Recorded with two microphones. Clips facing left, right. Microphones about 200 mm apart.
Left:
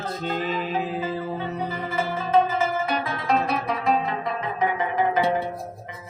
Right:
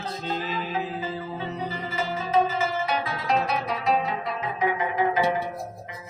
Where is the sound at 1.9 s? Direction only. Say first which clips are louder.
Left 3 dB; 55° left (ahead or behind).